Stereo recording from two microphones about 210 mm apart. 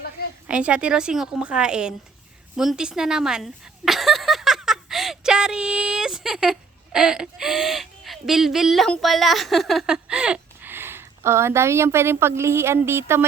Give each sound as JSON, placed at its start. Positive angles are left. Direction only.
{"t": 0.4, "sound": "speech", "side_deg": -5}